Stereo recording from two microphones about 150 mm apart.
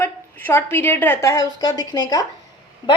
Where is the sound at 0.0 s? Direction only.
15° left (ahead or behind).